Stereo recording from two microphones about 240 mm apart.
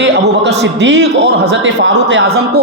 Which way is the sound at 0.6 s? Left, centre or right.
Right.